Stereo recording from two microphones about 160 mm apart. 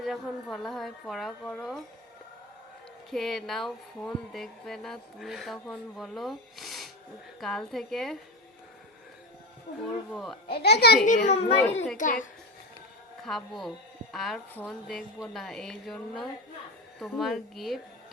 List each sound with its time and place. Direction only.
0.0 s speech: centre (ahead or behind)
3.1 s speech: centre (ahead or behind)
10.1 s speech: centre (ahead or behind)
10.5 s a child's voice: 90° left
11.3 s a child's voice: 40° left (ahead or behind)
11.9 s a child's voice: 55° left (ahead or behind)
13.2 s a woman's voice: centre (ahead or behind)